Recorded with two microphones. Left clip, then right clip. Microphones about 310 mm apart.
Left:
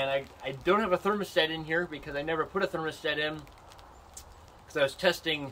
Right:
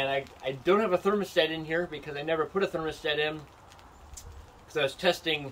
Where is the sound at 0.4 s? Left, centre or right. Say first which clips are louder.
Right 3 dB; centre.